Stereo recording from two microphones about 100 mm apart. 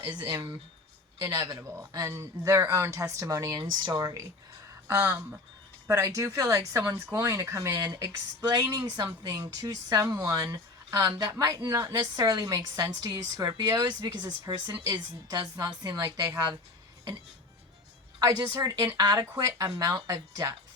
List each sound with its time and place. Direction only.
0.0 s a woman's voice: 45° right (ahead or behind)
18.2 s a woman's voice: 40° right (ahead or behind)